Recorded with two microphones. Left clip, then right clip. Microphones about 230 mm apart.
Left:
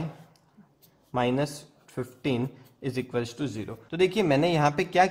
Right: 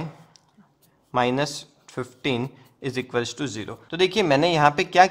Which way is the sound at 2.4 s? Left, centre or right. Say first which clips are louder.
Right 3 dB; right.